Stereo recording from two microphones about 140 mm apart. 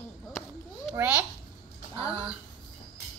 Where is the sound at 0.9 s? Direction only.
15° right (ahead or behind).